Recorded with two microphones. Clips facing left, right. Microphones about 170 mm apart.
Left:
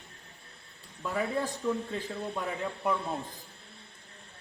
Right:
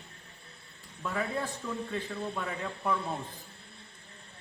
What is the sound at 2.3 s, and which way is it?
Speech, 15° left (ahead or behind).